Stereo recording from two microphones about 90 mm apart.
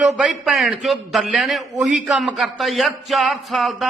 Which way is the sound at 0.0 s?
Centre (ahead or behind).